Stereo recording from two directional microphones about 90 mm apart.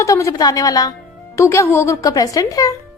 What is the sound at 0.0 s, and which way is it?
Speech, 35° left (ahead or behind).